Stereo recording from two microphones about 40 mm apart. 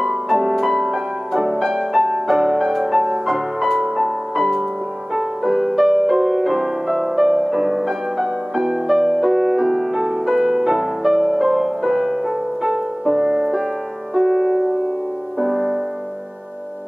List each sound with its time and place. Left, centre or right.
0.0 s music: centre